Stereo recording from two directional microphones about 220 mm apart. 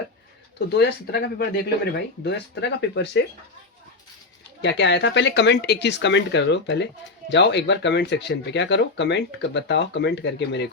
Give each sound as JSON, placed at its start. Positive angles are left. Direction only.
{"t": 0.8, "sound": "speech", "side_deg": 50}
{"t": 4.6, "sound": "speech", "side_deg": 50}